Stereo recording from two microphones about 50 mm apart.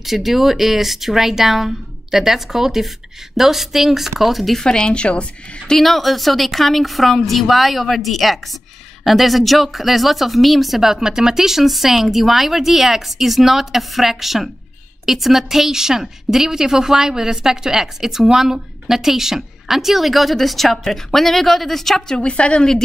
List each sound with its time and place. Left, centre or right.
0.0 s a woman's voice: centre
4.6 s speech: centre
5.7 s a woman's voice: centre